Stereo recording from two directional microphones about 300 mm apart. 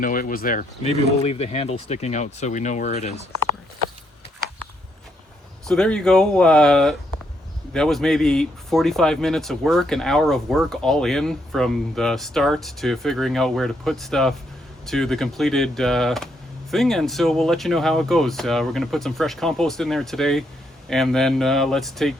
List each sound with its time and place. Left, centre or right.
0.0 s speech: left
5.6 s speech: centre